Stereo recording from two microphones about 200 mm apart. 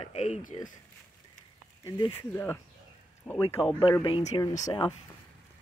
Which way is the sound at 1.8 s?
15° left (ahead or behind).